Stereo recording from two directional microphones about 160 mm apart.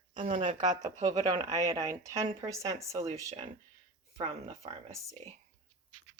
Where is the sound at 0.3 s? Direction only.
30° right (ahead or behind).